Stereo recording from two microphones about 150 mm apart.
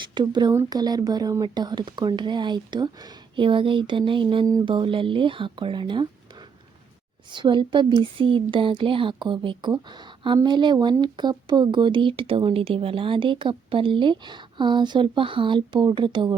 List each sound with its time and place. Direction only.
0.1 s speech: 30° right (ahead or behind)
7.3 s speech: 30° right (ahead or behind)